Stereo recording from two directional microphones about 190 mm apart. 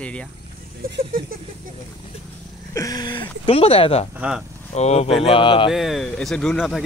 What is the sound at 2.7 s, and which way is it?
Speech, 20° left (ahead or behind).